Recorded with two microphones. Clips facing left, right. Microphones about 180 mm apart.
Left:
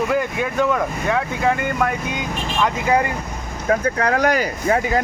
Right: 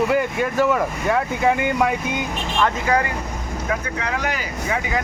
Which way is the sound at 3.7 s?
45° left (ahead or behind).